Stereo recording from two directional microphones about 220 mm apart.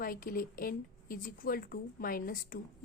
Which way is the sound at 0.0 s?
40° left (ahead or behind).